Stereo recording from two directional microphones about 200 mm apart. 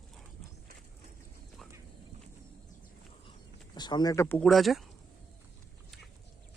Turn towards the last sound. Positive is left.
turn(degrees=0)  # may be behind; listen again after turning